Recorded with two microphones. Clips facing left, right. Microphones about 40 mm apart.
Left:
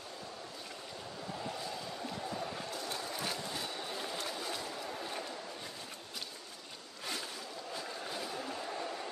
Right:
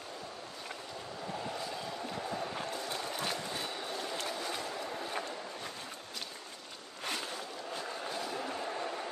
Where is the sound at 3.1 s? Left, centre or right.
Right.